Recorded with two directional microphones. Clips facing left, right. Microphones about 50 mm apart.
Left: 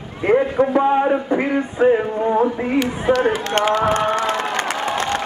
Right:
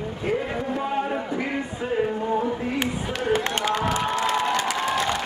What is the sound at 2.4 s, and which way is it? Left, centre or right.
Speech, left.